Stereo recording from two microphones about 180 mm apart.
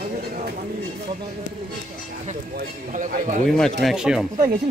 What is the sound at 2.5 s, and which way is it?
Speech, 50° right (ahead or behind).